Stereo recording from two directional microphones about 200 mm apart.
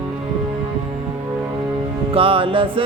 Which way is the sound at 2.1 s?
25° right (ahead or behind).